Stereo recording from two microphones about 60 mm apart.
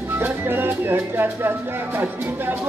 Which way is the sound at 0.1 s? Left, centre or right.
Right.